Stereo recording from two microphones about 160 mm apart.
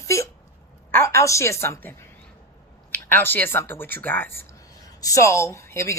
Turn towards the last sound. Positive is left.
turn(degrees=15)  # may be behind; listen again after turning